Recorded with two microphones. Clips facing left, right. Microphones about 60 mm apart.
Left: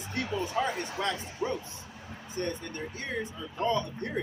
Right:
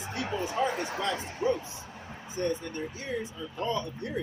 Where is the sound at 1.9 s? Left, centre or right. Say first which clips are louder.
Right 2 dB; right.